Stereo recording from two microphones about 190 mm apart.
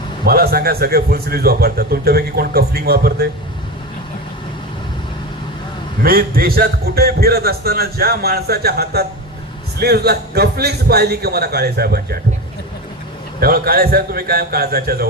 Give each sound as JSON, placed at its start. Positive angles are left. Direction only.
{"t": 0.3, "sound": "a man's voice", "side_deg": -55}
{"t": 6.0, "sound": "a man's voice", "side_deg": -50}
{"t": 13.4, "sound": "a man's voice", "side_deg": -55}